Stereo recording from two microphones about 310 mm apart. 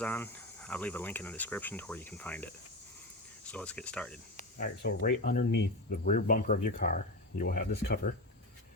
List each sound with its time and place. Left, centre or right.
0.0 s speech: centre
4.5 s speech: left